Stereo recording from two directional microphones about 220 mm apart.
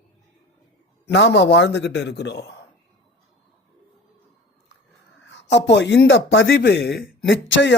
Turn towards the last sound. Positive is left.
turn(degrees=55)  # may be behind; listen again after turning